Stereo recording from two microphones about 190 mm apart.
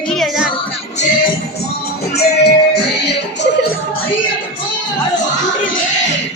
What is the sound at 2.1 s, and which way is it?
Music, 60° left (ahead or behind).